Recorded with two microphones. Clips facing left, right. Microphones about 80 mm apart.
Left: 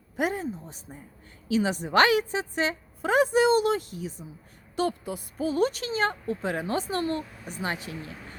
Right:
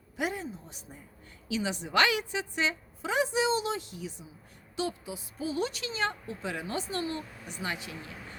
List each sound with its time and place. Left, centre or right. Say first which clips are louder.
0.2 s a woman's voice: left 5 dB; left
7.6 s a woman's voice: left 4 dB; left